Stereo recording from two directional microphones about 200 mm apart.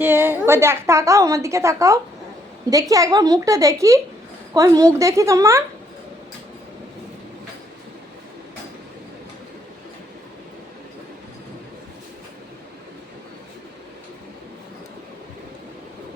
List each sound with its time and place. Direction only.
0.0 s a woman's voice: 10° right (ahead or behind)